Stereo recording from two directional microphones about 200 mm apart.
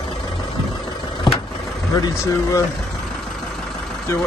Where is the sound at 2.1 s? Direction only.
15° left (ahead or behind).